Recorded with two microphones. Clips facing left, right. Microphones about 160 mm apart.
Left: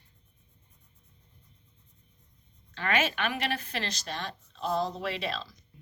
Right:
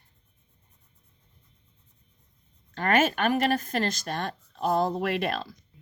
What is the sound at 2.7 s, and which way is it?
A woman's voice, 45° right (ahead or behind).